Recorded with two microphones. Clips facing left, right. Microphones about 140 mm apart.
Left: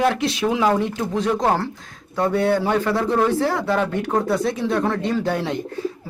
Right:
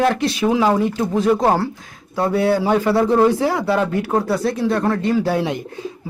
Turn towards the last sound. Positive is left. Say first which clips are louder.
# right 1 dB
turn(degrees=-15)  # may be behind; listen again after turning